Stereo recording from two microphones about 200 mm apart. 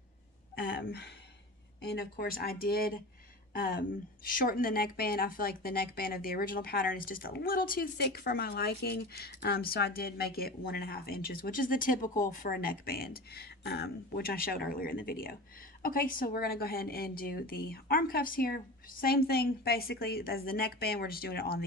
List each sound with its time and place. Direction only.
0.6 s a woman's voice: 65° left (ahead or behind); by 21.6 s 50° left (ahead or behind)